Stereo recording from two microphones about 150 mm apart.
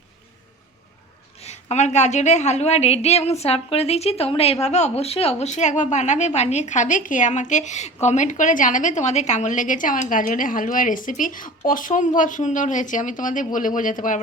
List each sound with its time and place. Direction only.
1.7 s a woman's voice: 50° left (ahead or behind)